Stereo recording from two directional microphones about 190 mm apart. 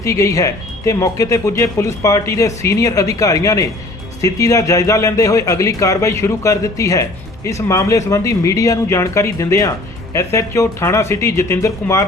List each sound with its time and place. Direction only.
0.0 s a man's voice: 15° left (ahead or behind)